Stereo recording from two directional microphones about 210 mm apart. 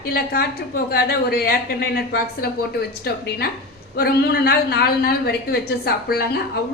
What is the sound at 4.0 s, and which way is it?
A woman's voice, 50° left (ahead or behind).